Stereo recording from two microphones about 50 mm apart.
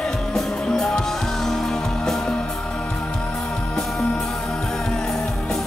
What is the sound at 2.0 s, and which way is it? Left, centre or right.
Music, centre.